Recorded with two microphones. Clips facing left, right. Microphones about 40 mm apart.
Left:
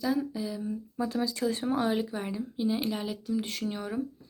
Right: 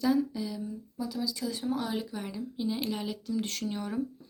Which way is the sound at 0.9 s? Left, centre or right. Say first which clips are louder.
Left 3 dB; left.